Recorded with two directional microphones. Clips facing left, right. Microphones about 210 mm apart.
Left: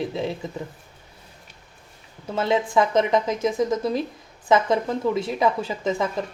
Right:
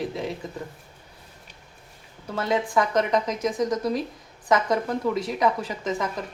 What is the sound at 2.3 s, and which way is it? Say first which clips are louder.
A woman's voice: left 3 dB; 25° left (ahead or behind).